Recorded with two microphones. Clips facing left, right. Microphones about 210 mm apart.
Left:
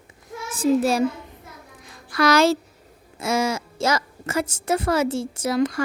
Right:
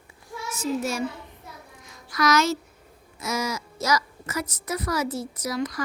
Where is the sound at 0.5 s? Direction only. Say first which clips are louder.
Left 8 dB; 30° left (ahead or behind).